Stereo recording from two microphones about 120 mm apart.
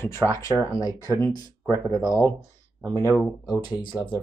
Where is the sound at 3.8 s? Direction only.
40° left (ahead or behind).